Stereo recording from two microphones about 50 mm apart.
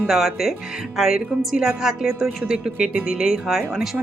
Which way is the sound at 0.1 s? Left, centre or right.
Centre.